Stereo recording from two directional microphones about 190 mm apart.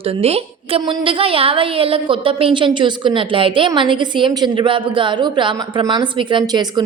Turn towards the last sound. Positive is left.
turn(degrees=-20)  # may be behind; listen again after turning